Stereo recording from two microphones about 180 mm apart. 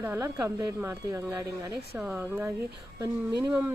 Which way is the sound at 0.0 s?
10° right (ahead or behind).